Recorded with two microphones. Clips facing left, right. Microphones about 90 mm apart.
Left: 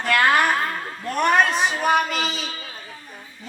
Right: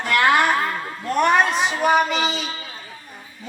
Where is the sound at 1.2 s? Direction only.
5° right (ahead or behind).